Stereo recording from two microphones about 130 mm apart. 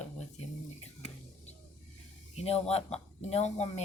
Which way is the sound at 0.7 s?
55° left (ahead or behind).